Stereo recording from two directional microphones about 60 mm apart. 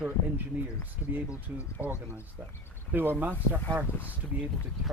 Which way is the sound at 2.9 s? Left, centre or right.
Right.